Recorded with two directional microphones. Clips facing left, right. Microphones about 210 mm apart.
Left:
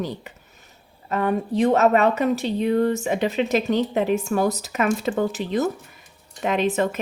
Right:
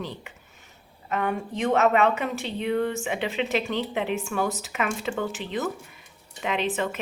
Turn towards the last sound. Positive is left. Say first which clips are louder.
# left 5 dB
turn(degrees=40)  # may be behind; listen again after turning